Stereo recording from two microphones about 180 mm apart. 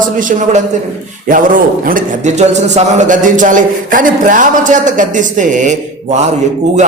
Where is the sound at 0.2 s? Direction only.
45° right (ahead or behind).